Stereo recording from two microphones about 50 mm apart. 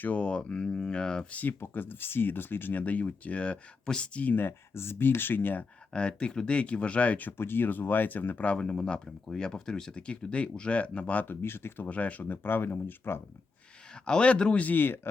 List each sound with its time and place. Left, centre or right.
0.0 s speech: left
1.3 s speech: left
1.6 s speech: left
2.8 s speech: left
4.4 s speech: left
5.9 s speech: centre
7.3 s speech: left
8.4 s speech: centre
11.3 s speech: left
11.9 s speech: left
12.3 s speech: left
14.0 s speech: centre
14.6 s speech: left